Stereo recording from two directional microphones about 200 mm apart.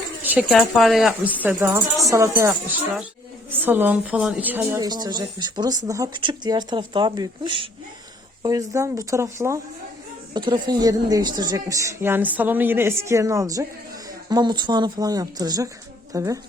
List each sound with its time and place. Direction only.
0.2 s a woman's voice: 5° right (ahead or behind)